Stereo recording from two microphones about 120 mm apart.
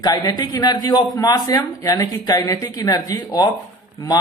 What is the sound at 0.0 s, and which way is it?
A man's voice, 35° left (ahead or behind).